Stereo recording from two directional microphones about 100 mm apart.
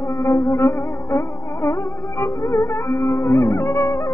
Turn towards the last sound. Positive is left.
turn(degrees=25)  # may be behind; listen again after turning